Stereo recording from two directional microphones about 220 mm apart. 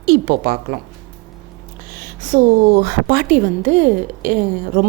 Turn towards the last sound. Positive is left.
turn(degrees=-35)  # may be behind; listen again after turning